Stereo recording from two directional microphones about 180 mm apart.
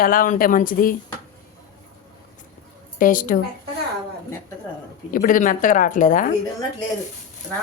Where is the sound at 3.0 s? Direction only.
50° left (ahead or behind).